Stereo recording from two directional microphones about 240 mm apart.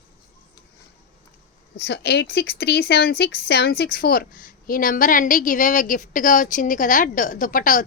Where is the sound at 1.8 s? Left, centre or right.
Left.